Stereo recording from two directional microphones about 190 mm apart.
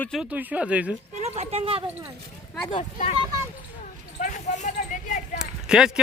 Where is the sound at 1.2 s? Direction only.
35° right (ahead or behind).